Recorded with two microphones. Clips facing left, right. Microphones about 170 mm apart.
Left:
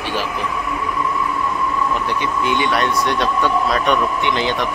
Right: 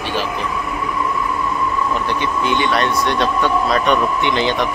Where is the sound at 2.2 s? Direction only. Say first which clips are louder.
Right 1 dB; 10° left (ahead or behind).